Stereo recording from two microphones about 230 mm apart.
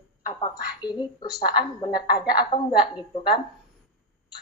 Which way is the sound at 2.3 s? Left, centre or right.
Centre.